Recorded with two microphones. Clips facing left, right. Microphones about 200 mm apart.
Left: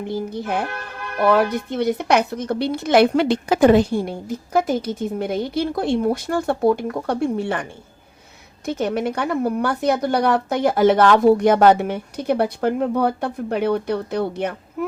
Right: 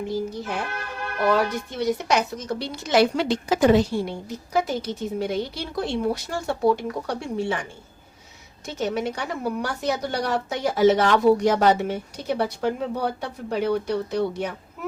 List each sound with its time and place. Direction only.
0.1 s a woman's voice: 60° left (ahead or behind)